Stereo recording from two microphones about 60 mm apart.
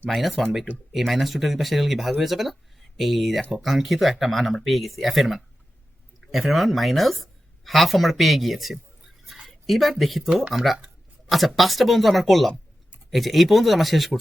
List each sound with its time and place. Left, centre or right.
0.1 s a woman's voice: centre